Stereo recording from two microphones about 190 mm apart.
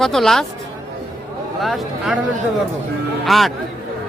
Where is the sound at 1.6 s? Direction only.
Centre (ahead or behind).